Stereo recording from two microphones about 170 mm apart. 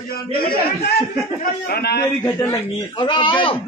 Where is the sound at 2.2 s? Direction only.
15° left (ahead or behind).